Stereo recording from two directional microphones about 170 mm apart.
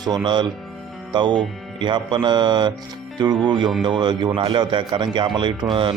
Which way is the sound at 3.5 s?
25° right (ahead or behind).